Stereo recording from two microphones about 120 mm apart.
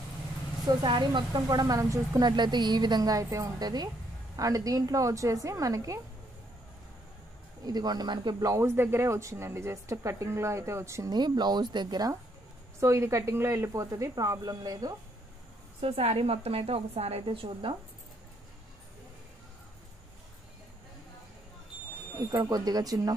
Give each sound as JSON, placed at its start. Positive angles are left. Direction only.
{"t": 0.7, "sound": "speech", "side_deg": -35}
{"t": 7.6, "sound": "speech", "side_deg": -35}
{"t": 11.1, "sound": "speech", "side_deg": -35}
{"t": 12.8, "sound": "speech", "side_deg": -25}
{"t": 15.8, "sound": "a woman's voice", "side_deg": -60}
{"t": 22.3, "sound": "speech", "side_deg": -35}